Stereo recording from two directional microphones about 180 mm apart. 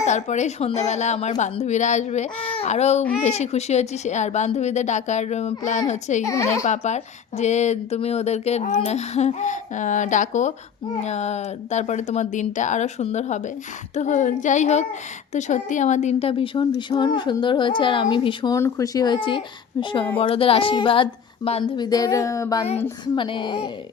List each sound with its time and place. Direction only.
0.0 s speech: 40° left (ahead or behind)
6.2 s speech: 15° left (ahead or behind)
6.7 s a child's voice: 40° left (ahead or behind)